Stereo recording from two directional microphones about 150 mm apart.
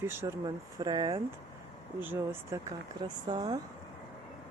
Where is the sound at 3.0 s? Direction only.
30° right (ahead or behind).